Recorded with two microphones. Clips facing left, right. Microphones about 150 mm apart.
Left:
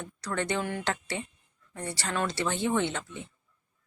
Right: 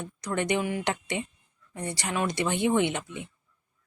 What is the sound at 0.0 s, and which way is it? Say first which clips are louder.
Speech: right 3 dB; 15° right (ahead or behind).